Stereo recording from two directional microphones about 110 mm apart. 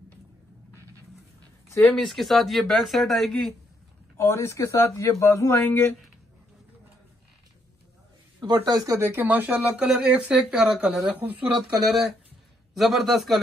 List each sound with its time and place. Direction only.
1.8 s speech: centre (ahead or behind)
4.2 s speech: 25° left (ahead or behind)
8.6 s speech: 35° right (ahead or behind)
9.1 s speech: 15° right (ahead or behind)
12.7 s speech: centre (ahead or behind)